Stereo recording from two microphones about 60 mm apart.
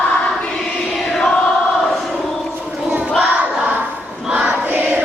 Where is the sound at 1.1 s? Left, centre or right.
Centre.